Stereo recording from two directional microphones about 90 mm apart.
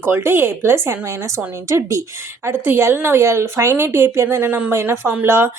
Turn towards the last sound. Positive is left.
turn(degrees=-25)  # may be behind; listen again after turning